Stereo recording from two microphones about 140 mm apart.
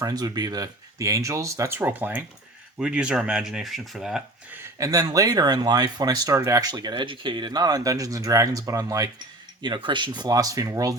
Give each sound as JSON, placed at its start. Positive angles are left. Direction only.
{"t": 0.0, "sound": "speech", "side_deg": -25}
{"t": 4.5, "sound": "speech", "side_deg": -25}